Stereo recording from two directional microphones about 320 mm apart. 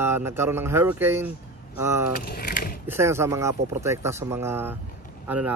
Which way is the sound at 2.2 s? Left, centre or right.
Left.